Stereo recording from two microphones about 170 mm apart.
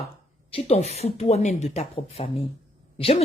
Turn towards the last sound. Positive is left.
turn(degrees=35)  # may be behind; listen again after turning